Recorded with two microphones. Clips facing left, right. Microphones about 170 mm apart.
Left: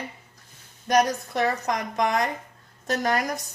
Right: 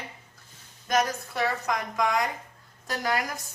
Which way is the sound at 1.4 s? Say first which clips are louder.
Left 3 dB; 40° left (ahead or behind).